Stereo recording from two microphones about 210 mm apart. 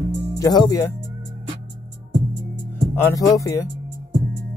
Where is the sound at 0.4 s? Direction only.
15° left (ahead or behind).